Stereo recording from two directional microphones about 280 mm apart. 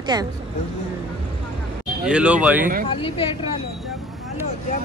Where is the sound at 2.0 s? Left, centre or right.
Centre.